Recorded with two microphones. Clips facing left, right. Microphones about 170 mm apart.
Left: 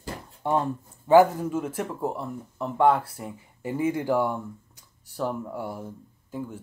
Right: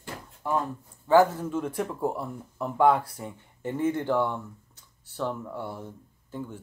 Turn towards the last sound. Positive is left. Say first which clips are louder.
# left 2 dB
turn(degrees=10)  # may be behind; listen again after turning